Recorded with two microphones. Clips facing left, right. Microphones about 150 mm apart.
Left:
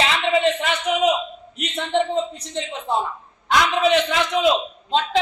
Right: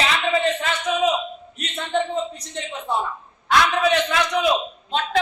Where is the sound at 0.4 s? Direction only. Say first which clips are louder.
Left 2 dB; 20° left (ahead or behind).